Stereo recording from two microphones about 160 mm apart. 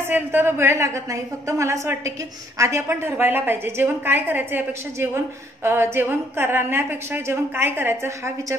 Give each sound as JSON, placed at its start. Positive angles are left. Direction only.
{"t": 0.0, "sound": "a woman's voice", "side_deg": -15}